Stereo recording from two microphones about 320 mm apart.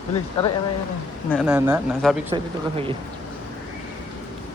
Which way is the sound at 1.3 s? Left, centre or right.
Centre.